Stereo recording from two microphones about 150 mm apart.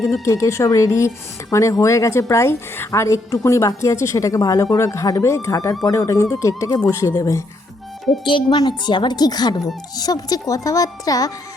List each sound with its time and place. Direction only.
0.0 s speech: 20° left (ahead or behind)
8.2 s speech: 35° left (ahead or behind)